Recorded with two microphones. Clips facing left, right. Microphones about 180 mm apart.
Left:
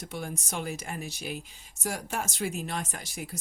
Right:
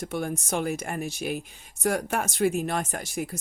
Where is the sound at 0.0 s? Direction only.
55° right (ahead or behind).